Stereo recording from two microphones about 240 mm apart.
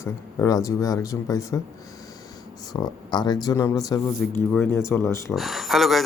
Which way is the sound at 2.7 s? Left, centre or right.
Centre.